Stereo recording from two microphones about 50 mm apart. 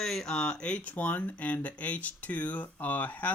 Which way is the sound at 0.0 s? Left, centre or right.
Centre.